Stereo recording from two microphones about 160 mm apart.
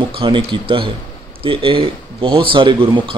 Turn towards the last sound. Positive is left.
turn(degrees=-30)  # may be behind; listen again after turning